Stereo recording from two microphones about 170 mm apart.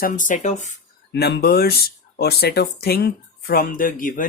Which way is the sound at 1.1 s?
80° left.